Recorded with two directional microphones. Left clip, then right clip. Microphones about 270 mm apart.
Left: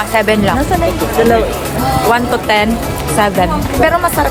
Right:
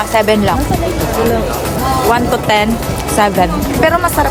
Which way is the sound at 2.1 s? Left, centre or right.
Centre.